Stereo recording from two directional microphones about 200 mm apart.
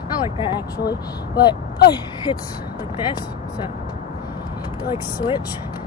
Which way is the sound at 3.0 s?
20° left (ahead or behind).